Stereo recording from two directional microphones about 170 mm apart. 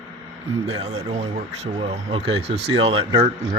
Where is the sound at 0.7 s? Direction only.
40° right (ahead or behind).